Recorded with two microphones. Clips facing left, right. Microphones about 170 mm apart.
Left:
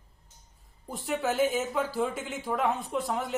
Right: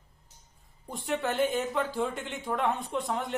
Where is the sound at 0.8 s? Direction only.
Centre (ahead or behind).